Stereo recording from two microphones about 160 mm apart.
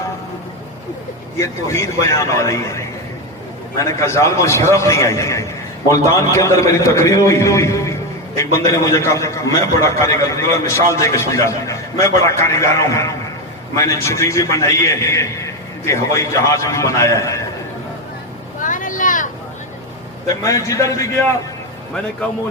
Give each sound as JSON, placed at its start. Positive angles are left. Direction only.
{"t": 1.4, "sound": "a man's voice", "side_deg": 20}
{"t": 18.6, "sound": "vehicle", "side_deg": 55}
{"t": 20.2, "sound": "a man's voice", "side_deg": 20}